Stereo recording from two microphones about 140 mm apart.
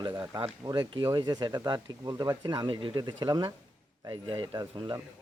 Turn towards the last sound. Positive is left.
turn(degrees=-25)  # may be behind; listen again after turning